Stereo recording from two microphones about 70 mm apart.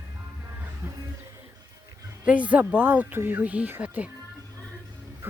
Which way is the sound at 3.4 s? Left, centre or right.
Centre.